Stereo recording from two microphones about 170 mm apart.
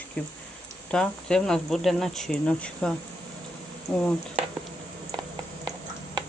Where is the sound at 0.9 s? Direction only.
5° left (ahead or behind).